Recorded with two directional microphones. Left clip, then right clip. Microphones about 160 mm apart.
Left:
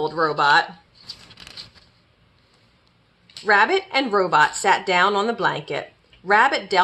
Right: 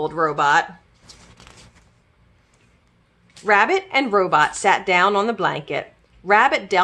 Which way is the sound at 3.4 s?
20° right (ahead or behind).